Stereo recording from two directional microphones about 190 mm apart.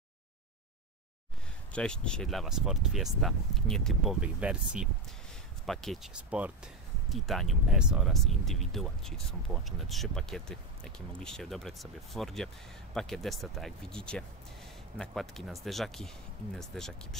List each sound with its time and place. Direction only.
1.7 s speech: 5° left (ahead or behind)